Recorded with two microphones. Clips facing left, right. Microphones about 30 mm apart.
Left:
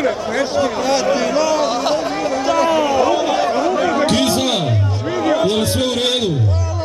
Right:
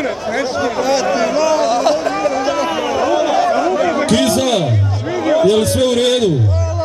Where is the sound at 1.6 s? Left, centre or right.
Centre.